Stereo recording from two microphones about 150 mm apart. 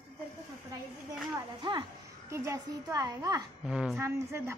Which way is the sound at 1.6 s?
30° right (ahead or behind).